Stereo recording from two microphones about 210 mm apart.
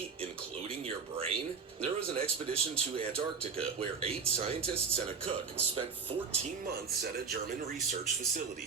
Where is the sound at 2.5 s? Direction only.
30° right (ahead or behind).